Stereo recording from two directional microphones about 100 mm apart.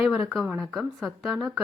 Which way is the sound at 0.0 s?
10° right (ahead or behind).